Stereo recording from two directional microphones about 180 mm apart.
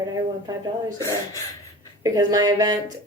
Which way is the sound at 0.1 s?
20° right (ahead or behind).